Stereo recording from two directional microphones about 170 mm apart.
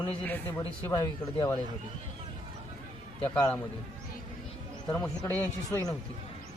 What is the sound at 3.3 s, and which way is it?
Speech, 5° left (ahead or behind).